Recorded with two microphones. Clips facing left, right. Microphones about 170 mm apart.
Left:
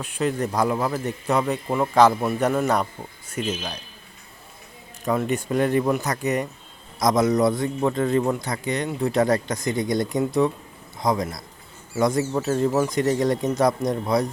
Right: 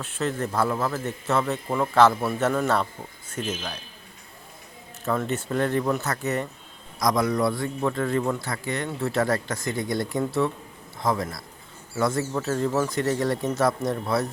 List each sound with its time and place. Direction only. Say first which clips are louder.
0.0 s speech: left 3 dB; 15° left (ahead or behind)
5.0 s a man's voice: left 3 dB; 15° left (ahead or behind)